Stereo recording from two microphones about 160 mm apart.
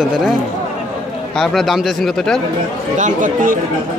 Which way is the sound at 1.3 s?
Centre (ahead or behind).